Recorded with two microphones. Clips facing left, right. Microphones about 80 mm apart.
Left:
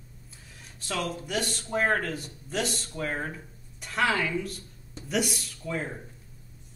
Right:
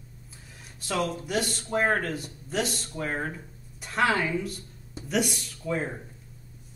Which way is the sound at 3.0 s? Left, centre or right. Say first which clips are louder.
Right 1 dB; centre.